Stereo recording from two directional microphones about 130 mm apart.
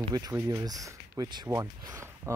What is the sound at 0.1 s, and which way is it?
Speech, 25° right (ahead or behind).